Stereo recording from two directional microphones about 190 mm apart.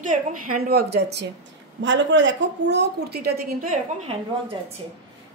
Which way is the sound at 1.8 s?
70° right (ahead or behind).